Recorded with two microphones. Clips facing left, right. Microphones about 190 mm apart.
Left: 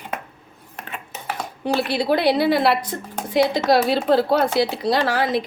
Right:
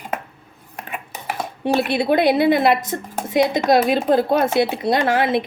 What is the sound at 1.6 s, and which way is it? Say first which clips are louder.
Speech: right 2 dB; 20° right (ahead or behind).